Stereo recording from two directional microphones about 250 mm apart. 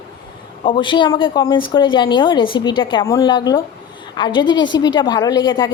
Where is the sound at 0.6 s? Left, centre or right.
Centre.